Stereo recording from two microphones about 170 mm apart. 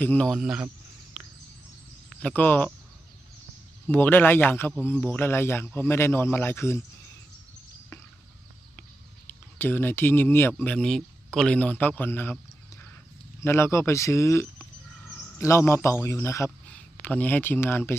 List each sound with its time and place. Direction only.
0.0 s speech: 10° left (ahead or behind)
0.4 s speech: 5° right (ahead or behind)
2.0 s speech: 10° left (ahead or behind)
3.8 s speech: 10° left (ahead or behind)
9.3 s speech: 10° left (ahead or behind)
13.4 s a man's voice: 15° left (ahead or behind)